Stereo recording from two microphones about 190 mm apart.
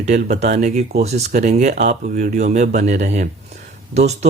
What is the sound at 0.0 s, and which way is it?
Speech, 40° right (ahead or behind).